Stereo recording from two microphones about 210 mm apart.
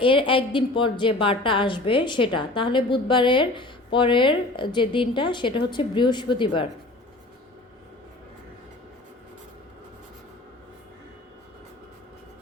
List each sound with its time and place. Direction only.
0.0 s a woman's voice: 25° left (ahead or behind)